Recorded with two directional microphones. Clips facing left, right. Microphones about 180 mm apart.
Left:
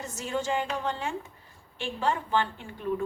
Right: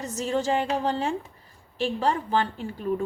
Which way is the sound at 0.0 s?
35° right (ahead or behind).